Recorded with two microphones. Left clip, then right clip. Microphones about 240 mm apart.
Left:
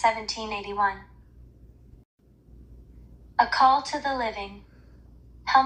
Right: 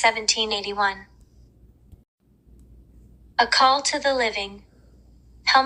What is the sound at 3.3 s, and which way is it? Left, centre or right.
Speech, right.